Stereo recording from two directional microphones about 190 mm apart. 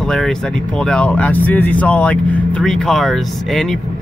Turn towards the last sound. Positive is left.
turn(degrees=0)  # may be behind; listen again after turning